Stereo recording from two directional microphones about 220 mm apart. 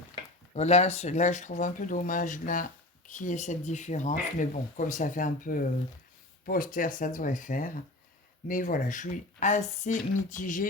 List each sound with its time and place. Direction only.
0.5 s speech: 30° left (ahead or behind)